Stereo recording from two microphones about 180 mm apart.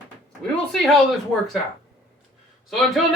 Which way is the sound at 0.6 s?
Centre (ahead or behind).